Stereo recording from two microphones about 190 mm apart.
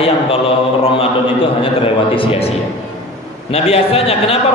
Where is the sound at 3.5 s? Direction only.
30° left (ahead or behind).